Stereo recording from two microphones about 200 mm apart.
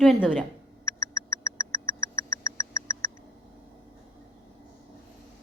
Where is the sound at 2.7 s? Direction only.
15° left (ahead or behind).